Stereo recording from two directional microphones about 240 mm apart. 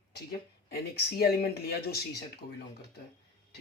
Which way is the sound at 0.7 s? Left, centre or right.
Left.